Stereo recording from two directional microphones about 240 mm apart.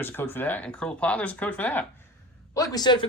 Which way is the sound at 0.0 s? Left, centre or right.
Centre.